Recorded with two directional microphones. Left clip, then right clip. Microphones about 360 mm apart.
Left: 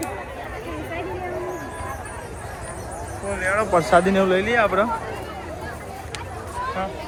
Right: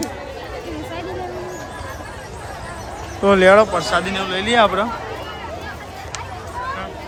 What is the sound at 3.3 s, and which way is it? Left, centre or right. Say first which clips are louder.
Speech: right 7 dB; centre.